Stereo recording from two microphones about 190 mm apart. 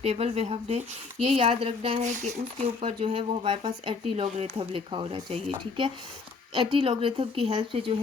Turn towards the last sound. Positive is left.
turn(degrees=-25)  # may be behind; listen again after turning